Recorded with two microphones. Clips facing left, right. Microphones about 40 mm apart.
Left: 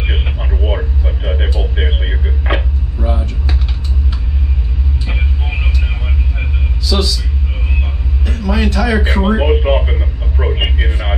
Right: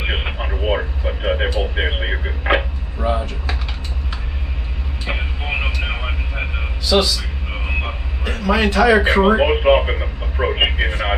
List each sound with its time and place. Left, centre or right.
0.0 s radio: right
5.0 s radio: right
5.8 s vehicle: right
8.5 s a sound: right
8.8 s speech: centre
10.4 s radio: right